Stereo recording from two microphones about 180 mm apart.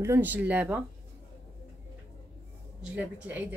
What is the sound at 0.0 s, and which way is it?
Speech, 10° right (ahead or behind).